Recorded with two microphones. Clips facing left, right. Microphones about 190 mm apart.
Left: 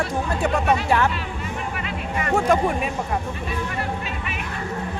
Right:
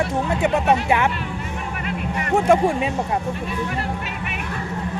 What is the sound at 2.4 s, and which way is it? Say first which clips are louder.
Speech: right 4 dB; 25° right (ahead or behind).